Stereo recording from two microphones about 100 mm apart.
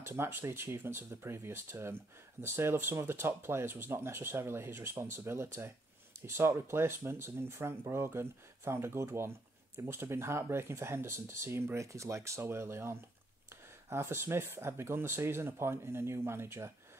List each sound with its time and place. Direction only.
0.0 s speech: 25° right (ahead or behind)